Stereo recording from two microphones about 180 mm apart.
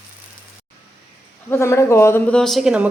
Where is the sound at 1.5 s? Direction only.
15° left (ahead or behind); by 2.8 s 5° right (ahead or behind).